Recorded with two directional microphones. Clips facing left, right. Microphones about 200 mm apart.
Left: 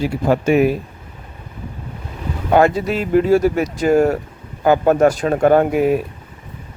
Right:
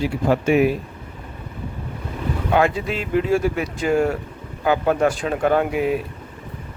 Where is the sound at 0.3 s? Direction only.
45° left (ahead or behind).